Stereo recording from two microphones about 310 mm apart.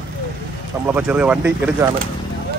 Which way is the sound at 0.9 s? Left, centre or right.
Centre.